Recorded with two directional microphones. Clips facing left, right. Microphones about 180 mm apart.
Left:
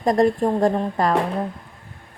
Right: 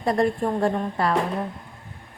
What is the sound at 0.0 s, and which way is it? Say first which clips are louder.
A woman's voice: left 4 dB; 40° left (ahead or behind).